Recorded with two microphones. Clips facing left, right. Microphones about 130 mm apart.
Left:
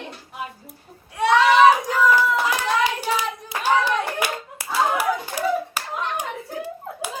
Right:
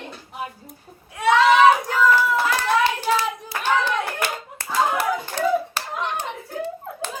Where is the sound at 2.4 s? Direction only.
15° left (ahead or behind).